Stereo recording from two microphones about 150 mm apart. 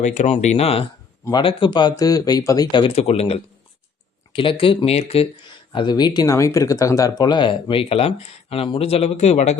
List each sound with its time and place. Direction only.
0.0 s speech: 50° left (ahead or behind)
5.7 s speech: 30° left (ahead or behind); by 9.6 s 45° left (ahead or behind)